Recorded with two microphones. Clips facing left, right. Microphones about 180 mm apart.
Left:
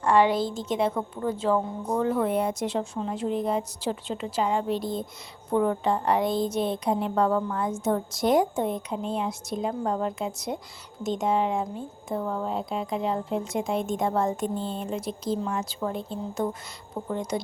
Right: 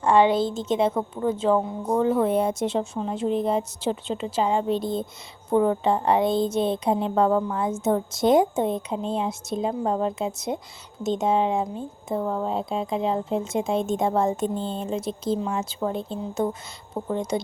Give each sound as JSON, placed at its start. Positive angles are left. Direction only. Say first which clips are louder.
{"t": 0.0, "sound": "speech", "louder": "right 3 dB", "side_deg": -25}